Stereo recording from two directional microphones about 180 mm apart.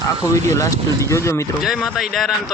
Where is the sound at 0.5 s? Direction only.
15° left (ahead or behind).